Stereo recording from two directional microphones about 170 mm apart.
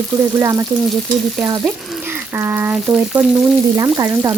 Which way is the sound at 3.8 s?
20° right (ahead or behind).